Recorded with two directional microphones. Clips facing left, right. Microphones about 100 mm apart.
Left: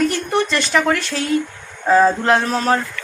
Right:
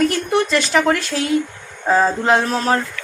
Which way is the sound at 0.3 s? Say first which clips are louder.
Right 1 dB; 5° right (ahead or behind).